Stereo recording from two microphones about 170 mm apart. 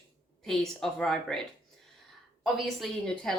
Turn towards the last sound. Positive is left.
turn(degrees=5)  # may be behind; listen again after turning